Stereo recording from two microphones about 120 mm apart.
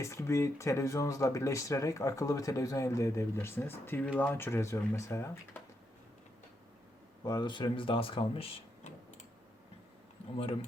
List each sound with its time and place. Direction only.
0.0 s speech: 25° left (ahead or behind)
7.3 s speech: 35° left (ahead or behind); by 8.5 s 50° left (ahead or behind)